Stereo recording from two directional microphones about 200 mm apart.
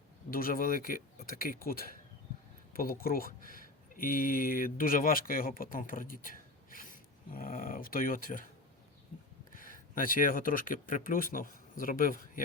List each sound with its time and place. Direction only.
0.3 s speech: 45° left (ahead or behind)
9.5 s speech: 45° left (ahead or behind)